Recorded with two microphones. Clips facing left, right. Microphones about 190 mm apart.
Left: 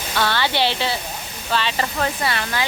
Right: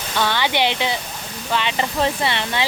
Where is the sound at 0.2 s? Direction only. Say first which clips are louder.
Right 1 dB; 15° right (ahead or behind).